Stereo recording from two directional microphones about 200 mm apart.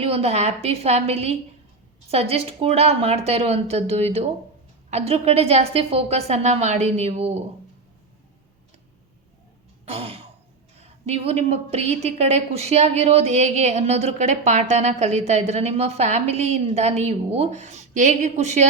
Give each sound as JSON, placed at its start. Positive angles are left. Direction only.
{"t": 0.0, "sound": "a woman's voice", "side_deg": -30}
{"t": 9.8, "sound": "throat clearing", "side_deg": -30}
{"t": 10.8, "sound": "a woman's voice", "side_deg": -30}